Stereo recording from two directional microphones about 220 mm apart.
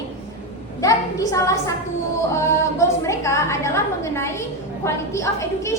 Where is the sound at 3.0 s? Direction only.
10° left (ahead or behind).